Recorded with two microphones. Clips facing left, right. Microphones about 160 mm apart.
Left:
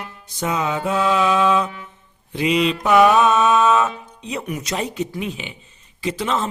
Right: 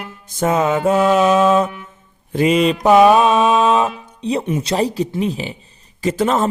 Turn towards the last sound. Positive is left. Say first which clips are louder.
# right 6 dB
turn(degrees=-45)  # may be behind; listen again after turning